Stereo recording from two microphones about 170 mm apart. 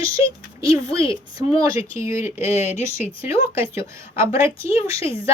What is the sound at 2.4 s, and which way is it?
Speech, 40° left (ahead or behind).